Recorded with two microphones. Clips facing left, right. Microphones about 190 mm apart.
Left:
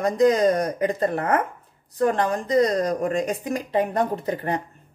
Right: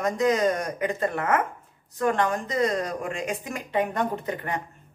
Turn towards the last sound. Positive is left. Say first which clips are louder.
# left 4 dB
turn(degrees=35)  # may be behind; listen again after turning